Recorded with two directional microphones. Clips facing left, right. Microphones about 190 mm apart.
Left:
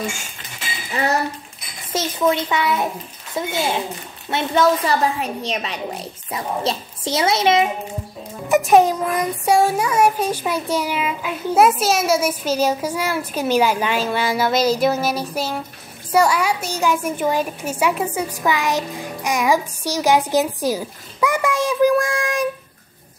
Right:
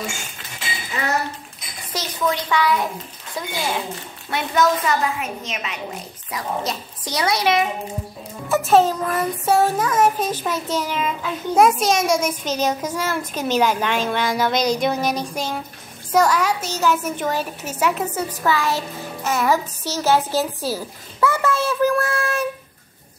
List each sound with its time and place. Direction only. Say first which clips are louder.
1.9 s a woman's voice: left 4 dB; 25° left (ahead or behind)
8.5 s child singing: left 2 dB; 15° left (ahead or behind)